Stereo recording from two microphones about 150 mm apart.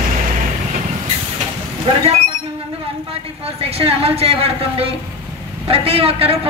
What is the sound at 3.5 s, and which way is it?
A man's voice, 40° right (ahead or behind).